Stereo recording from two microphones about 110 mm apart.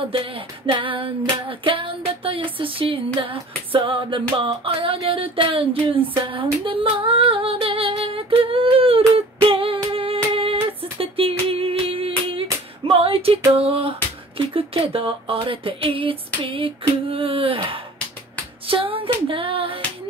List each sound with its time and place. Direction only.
0.1 s music: 55° right (ahead or behind)
13.5 s a sound: 60° right (ahead or behind)
18.7 s music: 55° right (ahead or behind)